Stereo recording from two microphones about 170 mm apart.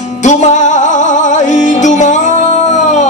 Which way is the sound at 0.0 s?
45° left (ahead or behind).